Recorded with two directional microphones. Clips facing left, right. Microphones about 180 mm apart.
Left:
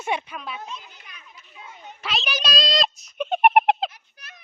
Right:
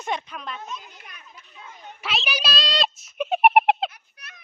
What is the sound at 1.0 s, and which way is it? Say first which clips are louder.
Children playing: right 2 dB; 50° right (ahead or behind).